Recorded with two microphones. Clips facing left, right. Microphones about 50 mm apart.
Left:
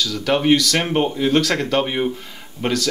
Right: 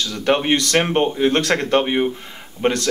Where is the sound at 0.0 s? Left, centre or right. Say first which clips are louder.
Even; right.